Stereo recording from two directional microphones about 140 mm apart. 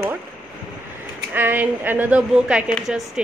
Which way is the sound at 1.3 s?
15° right (ahead or behind).